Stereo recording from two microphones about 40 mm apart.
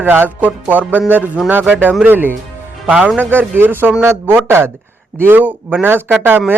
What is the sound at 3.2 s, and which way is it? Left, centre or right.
Speech, right.